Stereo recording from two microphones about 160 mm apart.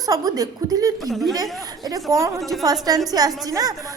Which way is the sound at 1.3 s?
20° right (ahead or behind).